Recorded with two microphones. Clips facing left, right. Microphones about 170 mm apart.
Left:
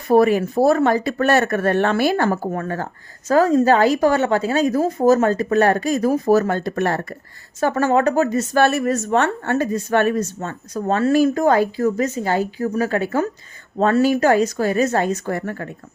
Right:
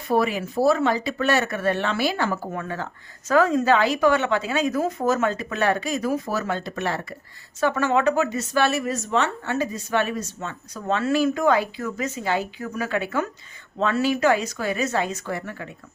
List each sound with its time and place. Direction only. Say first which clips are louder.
0.1 s speech: left 8 dB; 45° left (ahead or behind)